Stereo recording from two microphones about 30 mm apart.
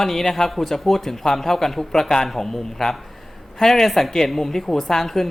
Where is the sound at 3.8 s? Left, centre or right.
Centre.